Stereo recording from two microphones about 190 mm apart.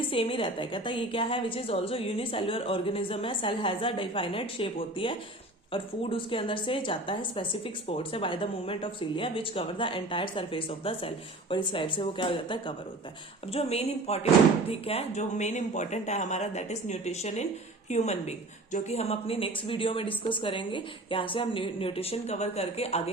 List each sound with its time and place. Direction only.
0.1 s a woman's voice: 30° left (ahead or behind)